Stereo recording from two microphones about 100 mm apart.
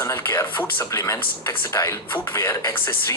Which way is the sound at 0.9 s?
30° left (ahead or behind).